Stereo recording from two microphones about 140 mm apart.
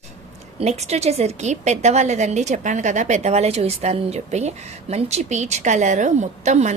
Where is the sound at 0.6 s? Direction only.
50° right (ahead or behind).